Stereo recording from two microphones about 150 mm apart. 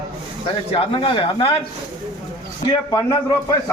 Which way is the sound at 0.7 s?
35° left (ahead or behind).